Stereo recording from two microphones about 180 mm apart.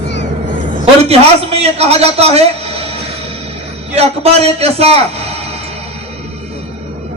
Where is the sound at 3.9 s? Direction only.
35° right (ahead or behind).